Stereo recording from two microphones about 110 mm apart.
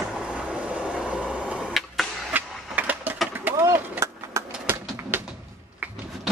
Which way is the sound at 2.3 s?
15° right (ahead or behind).